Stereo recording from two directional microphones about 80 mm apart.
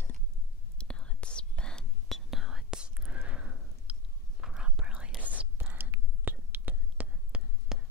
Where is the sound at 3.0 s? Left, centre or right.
Centre.